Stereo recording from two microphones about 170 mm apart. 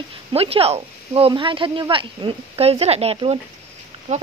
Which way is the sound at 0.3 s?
35° right (ahead or behind).